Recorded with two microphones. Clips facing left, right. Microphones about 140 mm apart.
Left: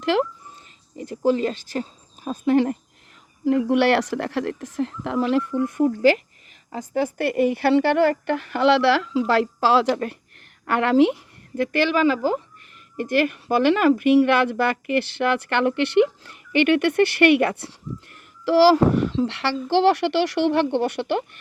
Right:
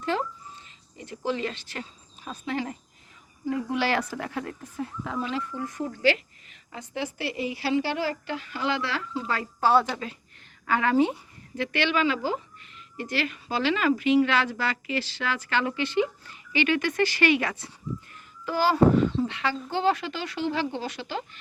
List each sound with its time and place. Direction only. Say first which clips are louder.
0.0 s speech: left 7 dB; 80° left
0.9 s speech: left 9 dB; 40° left (ahead or behind)
2.4 s speech: left 12 dB; 55° left (ahead or behind)
3.4 s a child's voice: left 9 dB; 70° left (ahead or behind)
6.7 s speech: left 9 dB; 45° left (ahead or behind); by 10.0 s 90° left
10.7 s a child's voice: left 5 dB; 70° left (ahead or behind)
11.5 s speech: left 6 dB; 45° left (ahead or behind); by 17.7 s 65° left (ahead or behind)
18.4 s a child's voice: left 6 dB; 75° left (ahead or behind)